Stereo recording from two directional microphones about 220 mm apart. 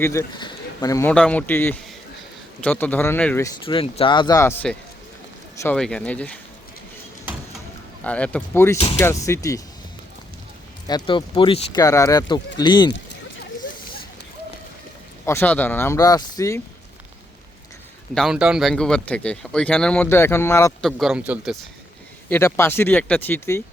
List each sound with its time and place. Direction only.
0.0 s speech: 15° left (ahead or behind)
3.7 s speech: 25° left (ahead or behind); by 6.3 s 5° left (ahead or behind)
8.0 s speech: 5° left (ahead or behind)
10.8 s speech: 20° left (ahead or behind)
15.3 s speech: 10° left (ahead or behind)
18.1 s speech: centre (ahead or behind)
20.8 s speech: centre (ahead or behind)
22.3 s speech: 10° left (ahead or behind)